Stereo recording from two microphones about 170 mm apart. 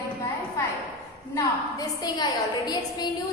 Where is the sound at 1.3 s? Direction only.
20° left (ahead or behind).